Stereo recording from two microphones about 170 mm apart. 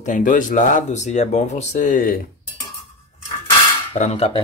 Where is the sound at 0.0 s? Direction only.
50° left (ahead or behind).